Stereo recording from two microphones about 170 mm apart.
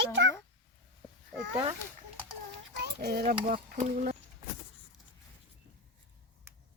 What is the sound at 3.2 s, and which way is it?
Speech, 55° right (ahead or behind).